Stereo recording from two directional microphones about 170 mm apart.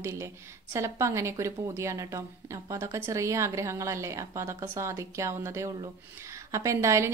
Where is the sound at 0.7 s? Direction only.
15° right (ahead or behind).